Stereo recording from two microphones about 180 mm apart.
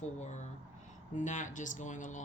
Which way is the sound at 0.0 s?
40° left (ahead or behind).